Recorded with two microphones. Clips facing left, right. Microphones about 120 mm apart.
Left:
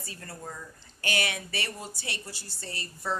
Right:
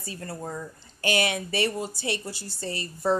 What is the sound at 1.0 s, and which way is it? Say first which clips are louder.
Speech: right 6 dB; 25° right (ahead or behind).